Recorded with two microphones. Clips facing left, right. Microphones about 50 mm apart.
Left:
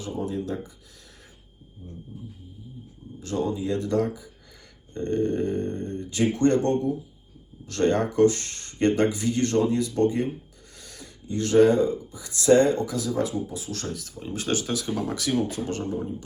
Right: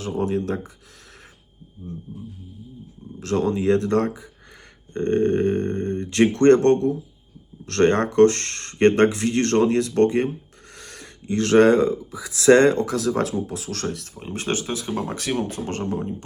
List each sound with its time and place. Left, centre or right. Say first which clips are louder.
0.0 s speech: right 6 dB; right
3.2 s speech: right 5 dB; right
14.2 s speech: even; right
15.9 s speech: right 3 dB; right